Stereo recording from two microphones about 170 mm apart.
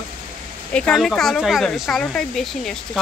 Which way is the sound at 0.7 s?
5° left (ahead or behind).